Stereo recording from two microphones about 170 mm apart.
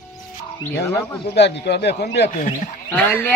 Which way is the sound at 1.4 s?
90° left.